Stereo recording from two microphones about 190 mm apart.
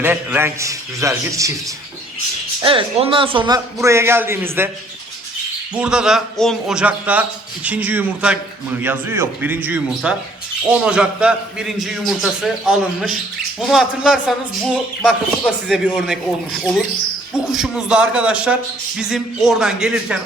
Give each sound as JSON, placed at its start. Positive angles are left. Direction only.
{"t": 0.0, "sound": "speech", "side_deg": -10}
{"t": 2.6, "sound": "speech", "side_deg": -25}
{"t": 5.7, "sound": "a man's voice", "side_deg": -5}